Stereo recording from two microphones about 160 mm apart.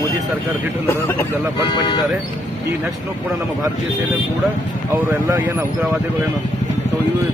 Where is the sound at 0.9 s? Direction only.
15° left (ahead or behind).